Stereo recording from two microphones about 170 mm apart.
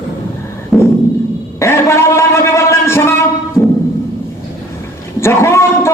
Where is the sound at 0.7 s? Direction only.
Centre (ahead or behind).